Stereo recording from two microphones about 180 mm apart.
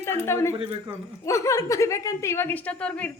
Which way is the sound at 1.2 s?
15° left (ahead or behind).